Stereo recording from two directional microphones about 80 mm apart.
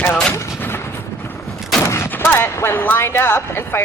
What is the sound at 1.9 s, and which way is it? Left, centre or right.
Speech, left.